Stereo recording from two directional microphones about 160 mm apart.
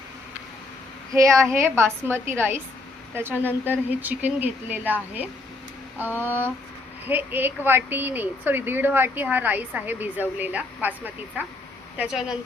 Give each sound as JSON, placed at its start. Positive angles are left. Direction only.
{"t": 1.1, "sound": "a woman's voice", "side_deg": -20}
{"t": 3.3, "sound": "speech", "side_deg": 10}
{"t": 3.7, "sound": "a woman's voice", "side_deg": -10}
{"t": 6.1, "sound": "speech", "side_deg": 10}
{"t": 7.0, "sound": "a woman's voice", "side_deg": -10}